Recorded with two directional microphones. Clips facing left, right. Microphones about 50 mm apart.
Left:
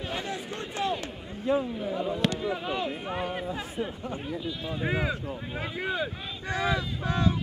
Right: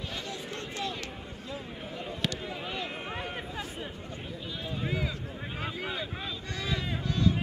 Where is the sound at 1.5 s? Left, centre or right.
Left.